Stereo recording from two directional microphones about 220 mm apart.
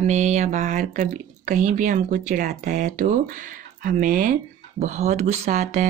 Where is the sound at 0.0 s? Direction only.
30° right (ahead or behind).